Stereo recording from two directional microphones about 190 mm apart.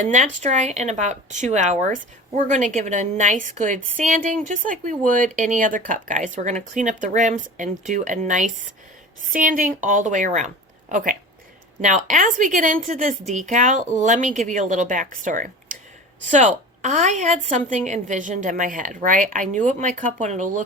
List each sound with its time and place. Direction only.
0.0 s a woman's voice: 40° right (ahead or behind)